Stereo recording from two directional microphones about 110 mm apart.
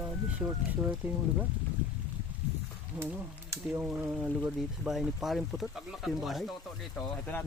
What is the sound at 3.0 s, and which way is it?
Speech, 20° right (ahead or behind).